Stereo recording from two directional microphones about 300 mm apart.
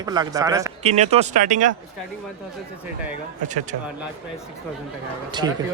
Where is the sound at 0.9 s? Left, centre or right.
Right.